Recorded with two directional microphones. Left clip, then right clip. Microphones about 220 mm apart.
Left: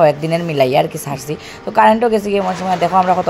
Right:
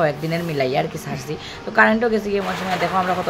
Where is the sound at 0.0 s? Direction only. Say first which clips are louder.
Left 8 dB; 25° left (ahead or behind).